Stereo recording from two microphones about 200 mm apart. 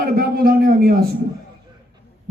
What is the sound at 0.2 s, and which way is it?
Speech, 45° right (ahead or behind).